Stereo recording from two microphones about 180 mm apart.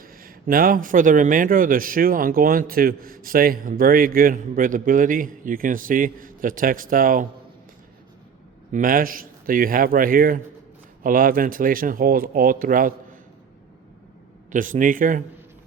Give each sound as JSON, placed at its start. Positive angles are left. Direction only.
{"t": 0.0, "sound": "a man's voice", "side_deg": -55}
{"t": 8.7, "sound": "a man's voice", "side_deg": -50}
{"t": 14.5, "sound": "a man's voice", "side_deg": -45}